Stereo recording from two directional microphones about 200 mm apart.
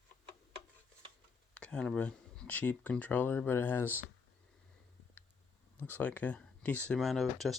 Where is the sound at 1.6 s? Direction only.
5° left (ahead or behind).